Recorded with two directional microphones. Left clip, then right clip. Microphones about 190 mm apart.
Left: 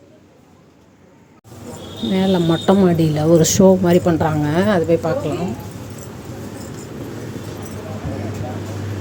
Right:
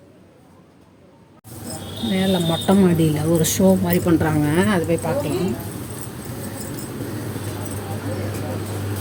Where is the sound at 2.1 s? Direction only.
20° left (ahead or behind).